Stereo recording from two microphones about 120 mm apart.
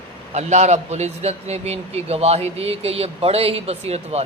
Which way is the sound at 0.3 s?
70° right (ahead or behind).